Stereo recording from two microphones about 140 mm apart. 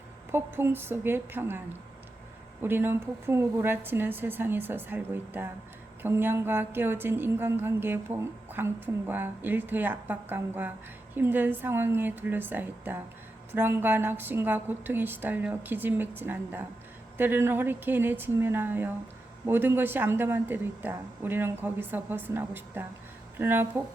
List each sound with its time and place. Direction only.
0.3 s a woman's voice: 15° right (ahead or behind)